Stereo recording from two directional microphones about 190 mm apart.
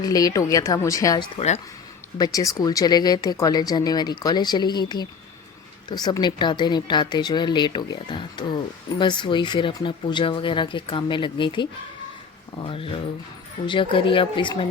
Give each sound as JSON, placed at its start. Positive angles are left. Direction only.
{"t": 0.0, "sound": "speech", "side_deg": 20}
{"t": 1.4, "sound": "speech", "side_deg": 35}
{"t": 2.1, "sound": "speech", "side_deg": 20}